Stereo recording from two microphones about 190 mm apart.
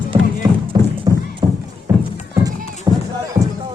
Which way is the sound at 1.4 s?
20° right (ahead or behind).